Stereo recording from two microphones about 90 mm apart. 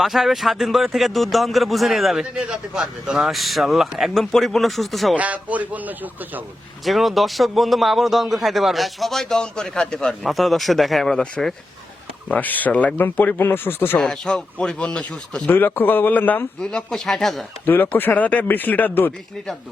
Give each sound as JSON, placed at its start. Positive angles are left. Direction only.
{"t": 0.0, "sound": "speech", "side_deg": 0}
{"t": 5.1, "sound": "speech", "side_deg": -15}
{"t": 6.8, "sound": "speech", "side_deg": 0}
{"t": 12.3, "sound": "speech", "side_deg": 20}
{"t": 14.0, "sound": "speech", "side_deg": 5}
{"t": 15.4, "sound": "speech", "side_deg": 25}
{"t": 16.6, "sound": "speech", "side_deg": 5}
{"t": 17.9, "sound": "speech", "side_deg": 20}